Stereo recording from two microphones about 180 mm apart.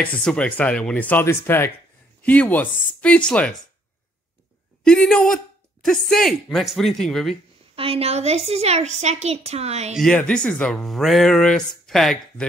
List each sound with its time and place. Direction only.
0.0 s speech: 5° left (ahead or behind)
4.8 s speech: 5° left (ahead or behind)
7.7 s a woman's voice: 30° right (ahead or behind)
9.9 s speech: 5° left (ahead or behind)